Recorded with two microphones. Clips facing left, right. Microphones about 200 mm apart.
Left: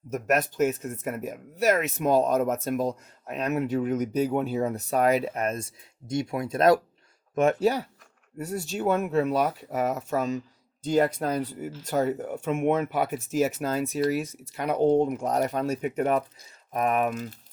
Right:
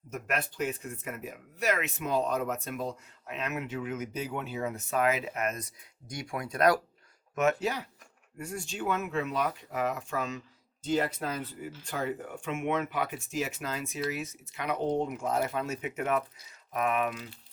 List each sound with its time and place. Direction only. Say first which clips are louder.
0.1 s speech: left 8 dB; 45° left (ahead or behind)